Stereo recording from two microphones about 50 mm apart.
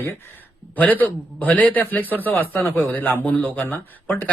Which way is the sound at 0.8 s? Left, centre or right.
Left.